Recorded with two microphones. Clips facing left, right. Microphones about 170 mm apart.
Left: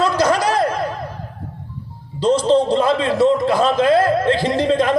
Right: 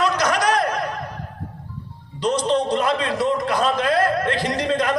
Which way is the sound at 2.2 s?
30° left (ahead or behind).